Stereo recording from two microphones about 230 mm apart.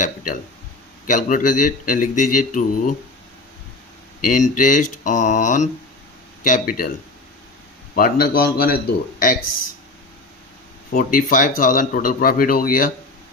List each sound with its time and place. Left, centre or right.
1.0 s speech: left
4.2 s speech: left
7.9 s speech: left
10.9 s speech: left